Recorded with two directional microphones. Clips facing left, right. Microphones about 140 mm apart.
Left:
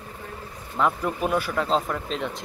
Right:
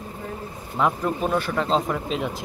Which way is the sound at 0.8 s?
5° right (ahead or behind).